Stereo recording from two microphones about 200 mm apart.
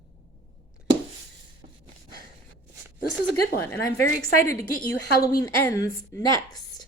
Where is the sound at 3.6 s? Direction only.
15° left (ahead or behind).